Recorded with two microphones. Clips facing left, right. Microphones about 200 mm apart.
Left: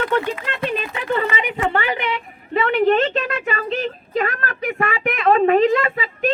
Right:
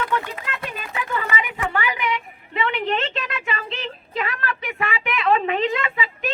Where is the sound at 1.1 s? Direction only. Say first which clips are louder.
Left 7 dB; 30° left (ahead or behind).